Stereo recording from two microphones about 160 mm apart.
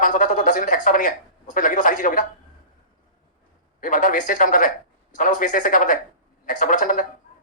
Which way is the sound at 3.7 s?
55° left (ahead or behind).